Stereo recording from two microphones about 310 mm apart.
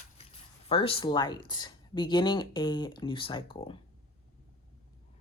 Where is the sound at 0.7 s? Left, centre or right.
Centre.